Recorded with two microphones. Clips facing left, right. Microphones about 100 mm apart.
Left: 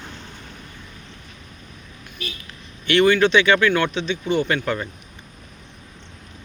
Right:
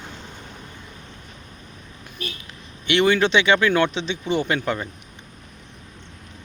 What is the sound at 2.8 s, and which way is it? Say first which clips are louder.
Speech: left 2 dB; 20° right (ahead or behind).